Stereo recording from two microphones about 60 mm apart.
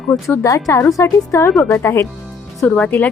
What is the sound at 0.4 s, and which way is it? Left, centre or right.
Speech, left.